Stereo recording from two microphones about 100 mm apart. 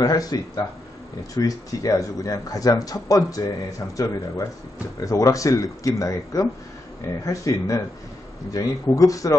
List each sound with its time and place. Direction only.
0.0 s speech: 40° left (ahead or behind)